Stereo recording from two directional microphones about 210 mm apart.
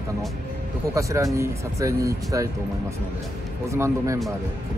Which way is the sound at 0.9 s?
15° right (ahead or behind).